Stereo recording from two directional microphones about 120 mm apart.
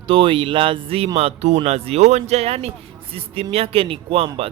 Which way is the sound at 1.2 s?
60° right (ahead or behind).